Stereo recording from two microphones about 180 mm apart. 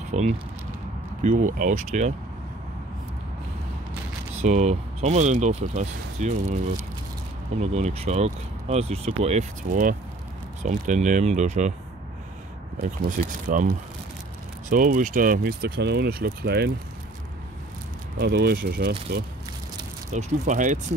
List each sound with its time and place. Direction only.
0.1 s speech: 40° right (ahead or behind)
4.4 s speech: 40° right (ahead or behind)
7.6 s speech: 40° right (ahead or behind)
13.5 s speech: 50° right (ahead or behind); by 16.7 s 65° right (ahead or behind)
18.3 s speech: 70° right (ahead or behind)
20.1 s speech: 40° right (ahead or behind)